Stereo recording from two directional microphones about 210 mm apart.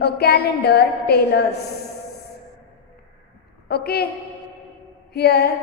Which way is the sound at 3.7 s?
50° left (ahead or behind).